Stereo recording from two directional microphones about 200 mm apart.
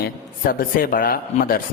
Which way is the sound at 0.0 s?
45° left (ahead or behind).